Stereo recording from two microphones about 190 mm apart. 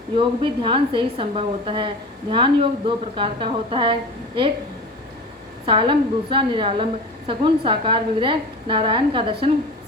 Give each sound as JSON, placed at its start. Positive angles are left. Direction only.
{"t": 0.2, "sound": "a woman's voice", "side_deg": -25}
{"t": 5.6, "sound": "a woman's voice", "side_deg": -25}